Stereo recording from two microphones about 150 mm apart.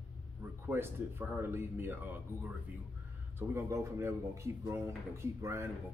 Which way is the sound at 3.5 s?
20° right (ahead or behind).